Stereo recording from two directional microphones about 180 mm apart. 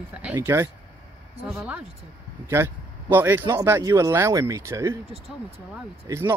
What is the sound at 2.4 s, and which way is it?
Speech, 10° right (ahead or behind).